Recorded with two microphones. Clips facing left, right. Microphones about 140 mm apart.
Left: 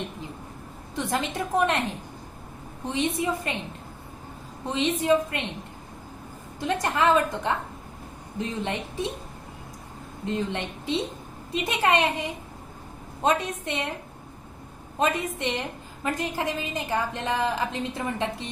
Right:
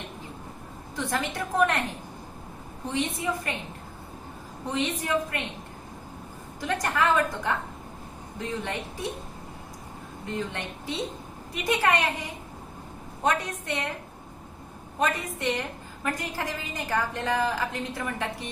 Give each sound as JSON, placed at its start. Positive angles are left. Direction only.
{"t": 0.9, "sound": "a woman's voice", "side_deg": 20}
{"t": 2.9, "sound": "a woman's voice", "side_deg": 20}
{"t": 4.7, "sound": "a woman's voice", "side_deg": 20}
{"t": 6.6, "sound": "a woman's voice", "side_deg": 20}
{"t": 10.2, "sound": "a woman's voice", "side_deg": 20}
{"t": 13.2, "sound": "a woman's voice", "side_deg": 20}
{"t": 14.9, "sound": "a woman's voice", "side_deg": 20}